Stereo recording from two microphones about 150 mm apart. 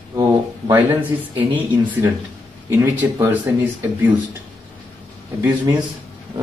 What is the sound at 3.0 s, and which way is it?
Speech, 15° right (ahead or behind).